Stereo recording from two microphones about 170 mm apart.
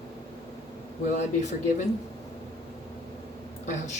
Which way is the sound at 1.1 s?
45° left (ahead or behind).